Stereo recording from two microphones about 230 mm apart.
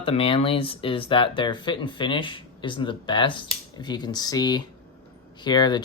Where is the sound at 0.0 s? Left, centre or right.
Left.